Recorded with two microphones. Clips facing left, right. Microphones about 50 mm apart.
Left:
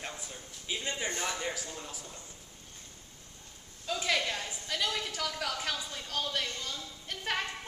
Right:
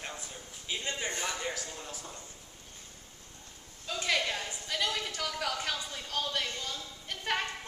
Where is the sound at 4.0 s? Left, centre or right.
Centre.